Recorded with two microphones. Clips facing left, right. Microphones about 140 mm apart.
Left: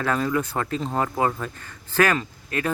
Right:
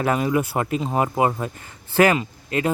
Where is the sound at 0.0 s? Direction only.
20° right (ahead or behind).